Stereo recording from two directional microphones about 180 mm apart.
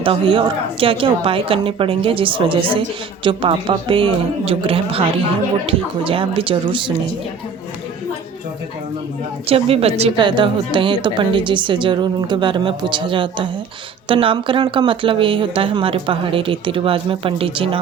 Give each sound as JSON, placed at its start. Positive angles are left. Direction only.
{"t": 0.0, "sound": "a woman's voice", "side_deg": -30}
{"t": 9.5, "sound": "a woman's voice", "side_deg": -35}